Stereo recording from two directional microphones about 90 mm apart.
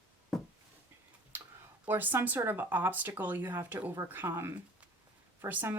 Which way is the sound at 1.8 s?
20° right (ahead or behind).